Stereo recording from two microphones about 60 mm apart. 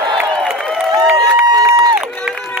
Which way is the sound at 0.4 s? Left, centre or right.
Centre.